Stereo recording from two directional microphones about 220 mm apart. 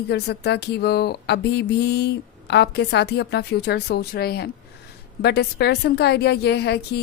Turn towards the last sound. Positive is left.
turn(degrees=50)  # may be behind; listen again after turning